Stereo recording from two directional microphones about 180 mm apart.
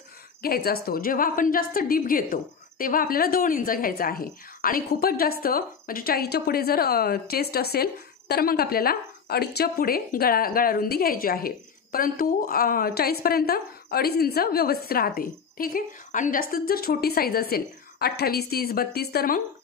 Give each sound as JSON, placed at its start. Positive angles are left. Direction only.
{"t": 0.4, "sound": "a woman's voice", "side_deg": 55}